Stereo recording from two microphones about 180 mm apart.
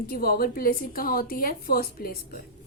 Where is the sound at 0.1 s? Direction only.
55° left (ahead or behind).